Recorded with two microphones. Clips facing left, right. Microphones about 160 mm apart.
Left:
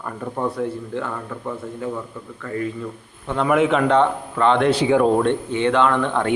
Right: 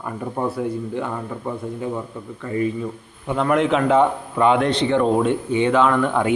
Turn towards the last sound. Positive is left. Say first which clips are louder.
# right 1 dB
turn(degrees=-10)  # may be behind; listen again after turning